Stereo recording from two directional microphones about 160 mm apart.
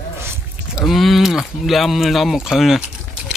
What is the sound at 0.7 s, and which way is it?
Speech, centre (ahead or behind).